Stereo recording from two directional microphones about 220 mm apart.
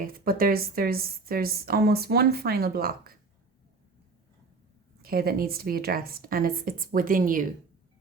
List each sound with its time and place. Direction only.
0.0 s a woman's voice: 40° right (ahead or behind)
5.0 s a woman's voice: 45° right (ahead or behind)